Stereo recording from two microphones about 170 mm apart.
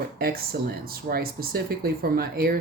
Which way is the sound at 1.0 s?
60° right (ahead or behind).